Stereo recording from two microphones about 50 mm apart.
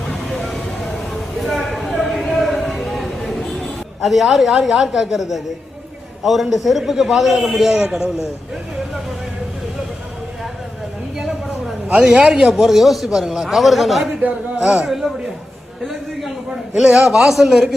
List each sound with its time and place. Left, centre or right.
0.1 s a sound: centre
6.2 s a man's voice: centre
11.9 s a man's voice: right; by 14.1 s centre
14.2 s speech: right
14.8 s a man's voice: centre
15.8 s a sound: centre
16.7 s a man's voice: centre